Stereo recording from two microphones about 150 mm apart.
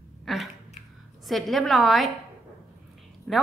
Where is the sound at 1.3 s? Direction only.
Centre (ahead or behind).